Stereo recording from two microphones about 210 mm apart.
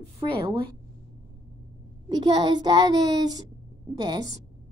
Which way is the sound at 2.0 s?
20° right (ahead or behind).